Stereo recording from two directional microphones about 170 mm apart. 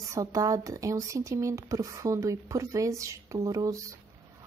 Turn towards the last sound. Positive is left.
turn(degrees=-20)  # may be behind; listen again after turning